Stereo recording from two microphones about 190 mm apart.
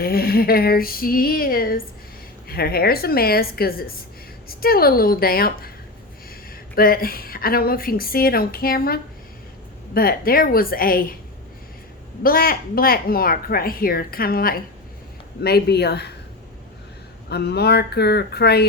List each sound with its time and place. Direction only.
0.0 s speech: 55° left (ahead or behind)
6.7 s speech: 50° left (ahead or behind)
12.2 s speech: 50° left (ahead or behind)
17.2 s speech: 60° left (ahead or behind)